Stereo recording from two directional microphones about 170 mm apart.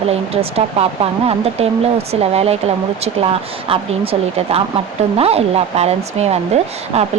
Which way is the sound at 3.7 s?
35° right (ahead or behind).